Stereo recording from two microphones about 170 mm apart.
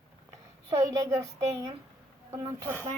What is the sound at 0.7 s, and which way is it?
A woman's voice, 20° right (ahead or behind).